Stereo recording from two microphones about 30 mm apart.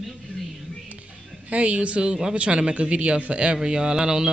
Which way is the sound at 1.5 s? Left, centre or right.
Right.